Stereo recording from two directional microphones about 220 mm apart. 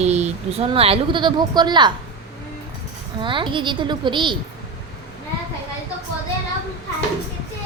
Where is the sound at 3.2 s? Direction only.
20° right (ahead or behind).